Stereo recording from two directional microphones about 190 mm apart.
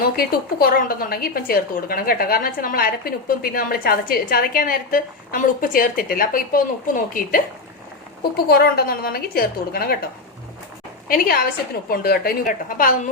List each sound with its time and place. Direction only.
0.0 s a woman's voice: 50° left (ahead or behind)
11.1 s a woman's voice: 50° left (ahead or behind)